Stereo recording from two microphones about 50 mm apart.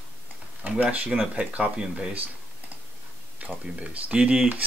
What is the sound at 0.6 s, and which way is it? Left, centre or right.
Speech, right.